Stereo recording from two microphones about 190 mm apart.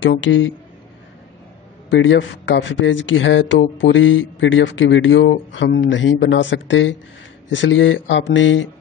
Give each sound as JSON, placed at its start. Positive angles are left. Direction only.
{"t": 0.0, "sound": "speech", "side_deg": 85}
{"t": 1.9, "sound": "speech", "side_deg": 75}